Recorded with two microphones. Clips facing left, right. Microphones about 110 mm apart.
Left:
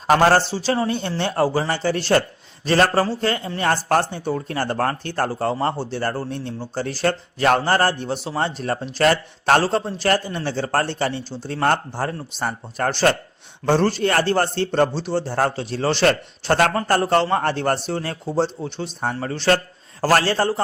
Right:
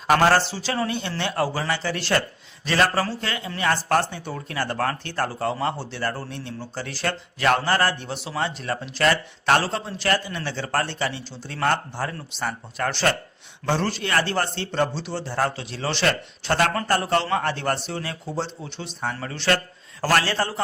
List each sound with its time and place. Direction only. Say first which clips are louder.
0.1 s speech: left 3 dB; 35° left (ahead or behind)